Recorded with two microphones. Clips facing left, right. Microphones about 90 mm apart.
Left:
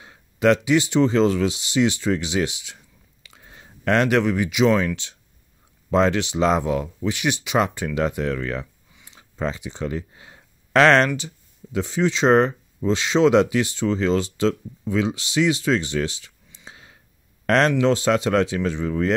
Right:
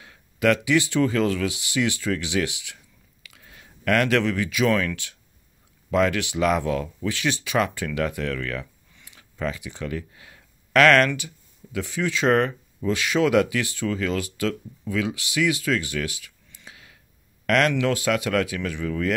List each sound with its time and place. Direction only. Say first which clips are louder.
0.0 s speech: left 3 dB; 25° left (ahead or behind)